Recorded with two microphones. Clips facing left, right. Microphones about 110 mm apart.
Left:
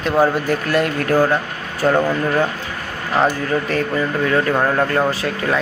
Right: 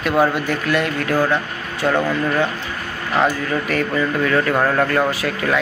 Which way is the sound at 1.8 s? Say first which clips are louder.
Left 2 dB; 10° left (ahead or behind).